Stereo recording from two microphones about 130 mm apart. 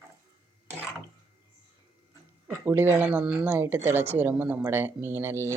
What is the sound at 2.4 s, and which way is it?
Speech, 20° right (ahead or behind).